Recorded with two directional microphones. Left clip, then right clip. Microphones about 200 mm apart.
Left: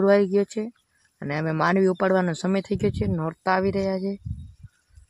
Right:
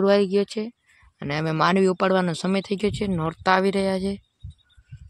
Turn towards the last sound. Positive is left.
turn(degrees=-5)  # may be behind; listen again after turning